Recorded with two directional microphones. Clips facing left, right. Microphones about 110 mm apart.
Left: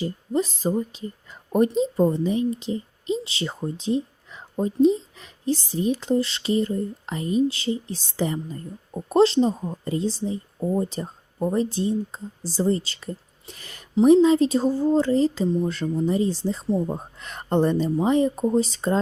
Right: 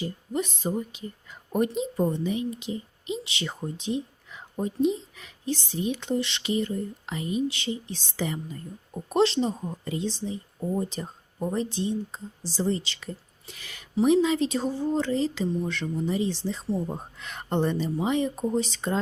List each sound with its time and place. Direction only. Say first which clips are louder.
0.0 s a woman's voice: left 5 dB; 35° left (ahead or behind)